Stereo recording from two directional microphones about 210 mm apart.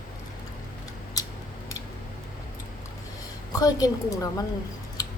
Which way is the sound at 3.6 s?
15° left (ahead or behind).